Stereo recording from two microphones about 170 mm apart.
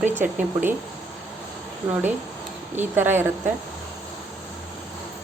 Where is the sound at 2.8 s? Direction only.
15° right (ahead or behind).